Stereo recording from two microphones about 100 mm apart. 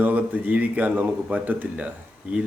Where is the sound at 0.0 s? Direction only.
15° right (ahead or behind).